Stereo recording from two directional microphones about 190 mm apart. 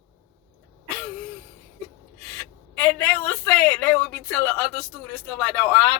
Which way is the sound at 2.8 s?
10° left (ahead or behind).